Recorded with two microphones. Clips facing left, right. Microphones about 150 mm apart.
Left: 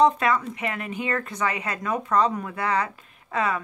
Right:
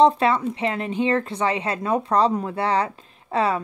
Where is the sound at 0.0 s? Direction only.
30° right (ahead or behind).